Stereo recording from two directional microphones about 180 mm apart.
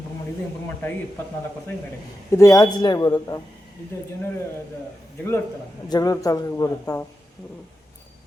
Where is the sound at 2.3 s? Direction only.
15° left (ahead or behind).